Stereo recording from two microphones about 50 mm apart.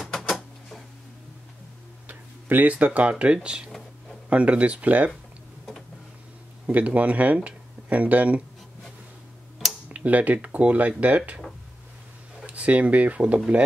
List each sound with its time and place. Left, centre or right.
0.1 s a sound: centre
2.0 s speech: right
6.6 s speech: right
9.8 s speech: right
12.4 s speech: right